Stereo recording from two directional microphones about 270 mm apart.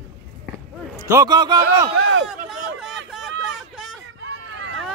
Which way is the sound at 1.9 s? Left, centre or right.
Right.